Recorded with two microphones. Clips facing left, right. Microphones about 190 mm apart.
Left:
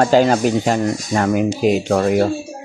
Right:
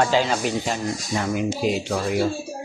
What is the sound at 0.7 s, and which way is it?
Speech, 65° left (ahead or behind).